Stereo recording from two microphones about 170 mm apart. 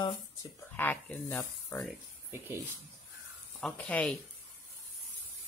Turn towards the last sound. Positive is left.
turn(degrees=5)  # may be behind; listen again after turning